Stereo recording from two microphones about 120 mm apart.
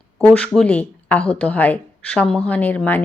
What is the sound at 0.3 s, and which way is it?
Speech, 10° left (ahead or behind).